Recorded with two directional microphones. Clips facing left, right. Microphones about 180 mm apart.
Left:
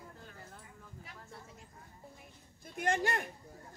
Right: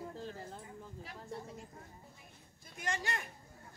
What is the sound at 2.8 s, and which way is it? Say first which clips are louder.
Speech: left 7 dB; 55° left (ahead or behind).